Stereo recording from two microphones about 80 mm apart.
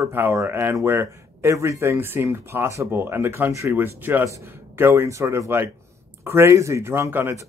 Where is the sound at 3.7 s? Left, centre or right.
Right.